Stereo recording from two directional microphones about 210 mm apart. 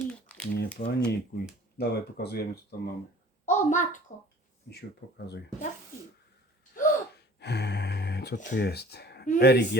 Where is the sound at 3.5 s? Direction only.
35° left (ahead or behind).